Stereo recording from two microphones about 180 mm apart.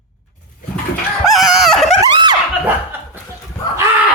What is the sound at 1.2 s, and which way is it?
Chicken, centre (ahead or behind).